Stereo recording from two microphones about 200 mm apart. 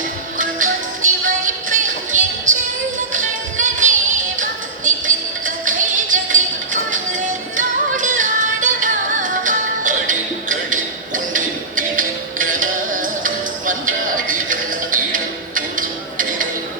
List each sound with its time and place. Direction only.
0.3 s music: 40° right (ahead or behind)
7.5 s music: 40° right (ahead or behind)